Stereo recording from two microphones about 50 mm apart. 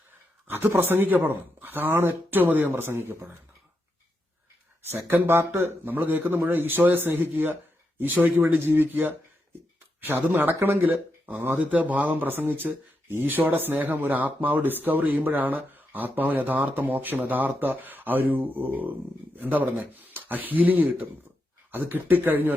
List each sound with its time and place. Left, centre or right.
0.5 s speech: right
4.9 s speech: right
5.4 s speech: right
5.8 s speech: right
10.8 s speech: right